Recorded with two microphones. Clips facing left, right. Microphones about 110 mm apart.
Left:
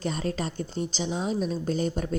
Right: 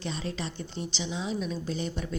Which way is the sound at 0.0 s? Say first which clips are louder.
Left 5 dB; 45° left (ahead or behind).